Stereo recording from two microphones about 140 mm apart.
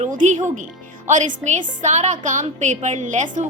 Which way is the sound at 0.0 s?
60° right (ahead or behind).